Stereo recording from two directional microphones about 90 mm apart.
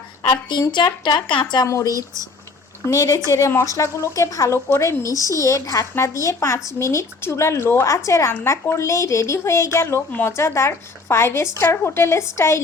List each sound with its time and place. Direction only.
0.3 s speech: 55° left (ahead or behind)
1.6 s speech: 35° left (ahead or behind)
2.9 s speech: 40° left (ahead or behind)